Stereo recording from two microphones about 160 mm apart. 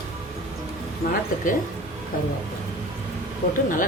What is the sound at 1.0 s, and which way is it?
Speech, 70° left (ahead or behind).